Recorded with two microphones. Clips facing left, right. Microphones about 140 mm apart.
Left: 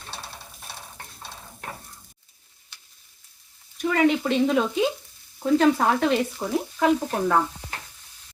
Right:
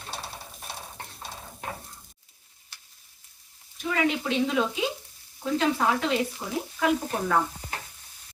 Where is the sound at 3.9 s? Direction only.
45° left (ahead or behind).